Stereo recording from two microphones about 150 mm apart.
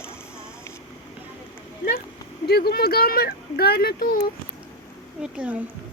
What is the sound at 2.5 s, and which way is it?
Speech, 90° left.